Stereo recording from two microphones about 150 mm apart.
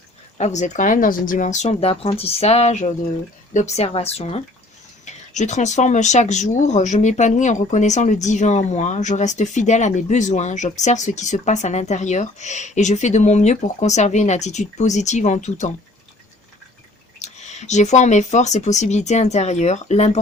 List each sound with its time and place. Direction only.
0.3 s speech: 50° left (ahead or behind)
17.2 s speech: 50° left (ahead or behind)